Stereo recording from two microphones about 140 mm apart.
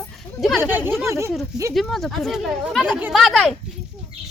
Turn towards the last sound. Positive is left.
turn(degrees=0)  # may be behind; listen again after turning